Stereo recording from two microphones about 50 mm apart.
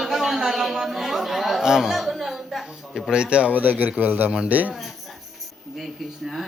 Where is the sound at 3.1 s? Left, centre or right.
Right.